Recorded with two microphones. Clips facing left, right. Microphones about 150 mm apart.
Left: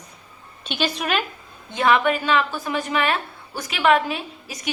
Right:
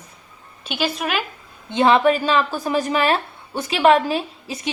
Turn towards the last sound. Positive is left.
turn(degrees=-30)  # may be behind; listen again after turning